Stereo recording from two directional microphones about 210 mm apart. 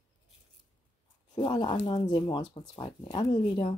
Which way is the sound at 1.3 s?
20° left (ahead or behind).